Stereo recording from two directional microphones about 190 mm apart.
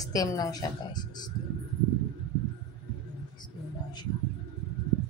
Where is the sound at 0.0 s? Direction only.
20° left (ahead or behind).